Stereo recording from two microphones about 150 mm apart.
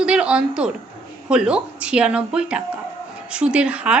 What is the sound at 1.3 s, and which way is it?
A woman's voice, 5° right (ahead or behind).